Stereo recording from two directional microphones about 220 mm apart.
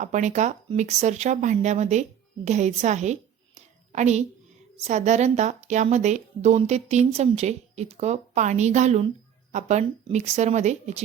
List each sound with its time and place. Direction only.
0.0 s a woman's voice: 35° right (ahead or behind)